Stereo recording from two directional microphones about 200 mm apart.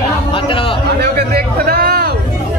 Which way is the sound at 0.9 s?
50° right (ahead or behind).